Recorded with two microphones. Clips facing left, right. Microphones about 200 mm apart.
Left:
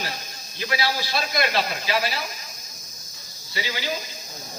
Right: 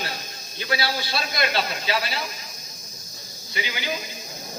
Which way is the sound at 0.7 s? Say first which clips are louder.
Even; 30° right (ahead or behind).